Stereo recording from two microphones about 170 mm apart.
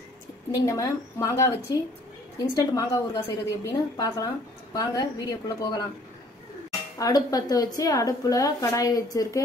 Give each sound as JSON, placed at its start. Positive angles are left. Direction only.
{"t": 0.6, "sound": "a woman's voice", "side_deg": 20}
{"t": 7.0, "sound": "a woman's voice", "side_deg": 20}